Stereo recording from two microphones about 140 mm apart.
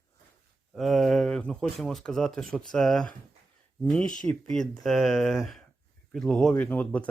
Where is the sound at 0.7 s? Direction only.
Centre (ahead or behind).